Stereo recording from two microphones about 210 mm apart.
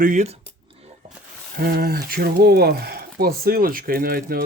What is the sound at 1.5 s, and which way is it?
Speech, 45° right (ahead or behind).